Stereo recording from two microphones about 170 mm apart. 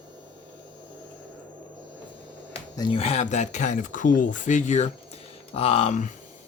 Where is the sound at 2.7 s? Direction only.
25° left (ahead or behind).